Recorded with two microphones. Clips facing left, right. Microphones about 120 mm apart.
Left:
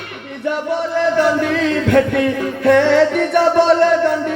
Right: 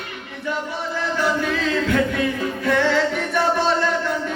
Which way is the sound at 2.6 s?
60° left (ahead or behind).